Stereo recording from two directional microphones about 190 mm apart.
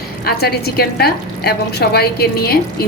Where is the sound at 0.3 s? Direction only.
55° left (ahead or behind).